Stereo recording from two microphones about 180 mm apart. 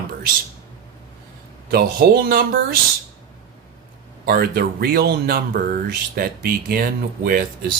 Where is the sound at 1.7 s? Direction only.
60° right (ahead or behind).